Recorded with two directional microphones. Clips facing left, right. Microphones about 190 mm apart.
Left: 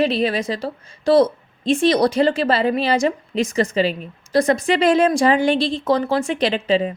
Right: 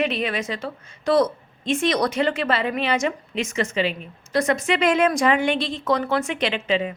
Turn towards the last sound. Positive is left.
turn(degrees=35)  # may be behind; listen again after turning